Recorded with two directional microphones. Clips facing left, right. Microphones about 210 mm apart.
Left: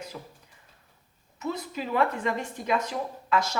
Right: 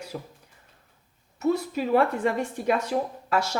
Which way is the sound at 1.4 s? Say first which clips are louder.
Right 8 dB; 45° right (ahead or behind).